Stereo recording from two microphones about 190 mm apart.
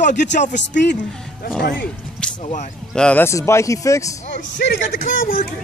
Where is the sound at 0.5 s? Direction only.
65° left (ahead or behind).